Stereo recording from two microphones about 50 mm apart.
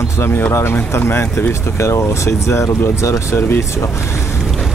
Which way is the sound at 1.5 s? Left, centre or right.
Left.